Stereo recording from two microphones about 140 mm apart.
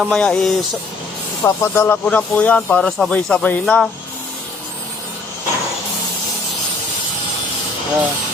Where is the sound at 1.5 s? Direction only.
15° left (ahead or behind).